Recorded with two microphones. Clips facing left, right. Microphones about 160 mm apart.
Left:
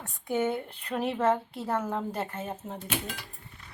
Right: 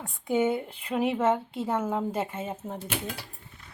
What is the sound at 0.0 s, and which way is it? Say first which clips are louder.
Speech: right 3 dB; 10° right (ahead or behind).